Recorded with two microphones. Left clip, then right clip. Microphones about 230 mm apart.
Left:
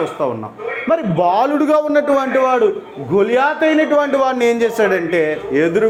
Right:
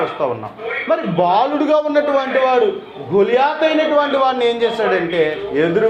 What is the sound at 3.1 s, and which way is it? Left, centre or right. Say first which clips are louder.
Speech: even; left.